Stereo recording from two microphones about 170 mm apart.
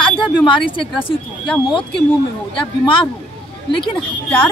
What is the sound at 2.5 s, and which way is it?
Speech, 30° left (ahead or behind).